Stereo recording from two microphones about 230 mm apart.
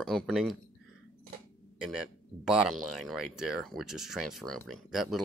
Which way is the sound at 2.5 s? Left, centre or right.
Centre.